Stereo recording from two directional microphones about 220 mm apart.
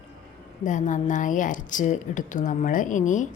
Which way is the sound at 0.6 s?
35° left (ahead or behind).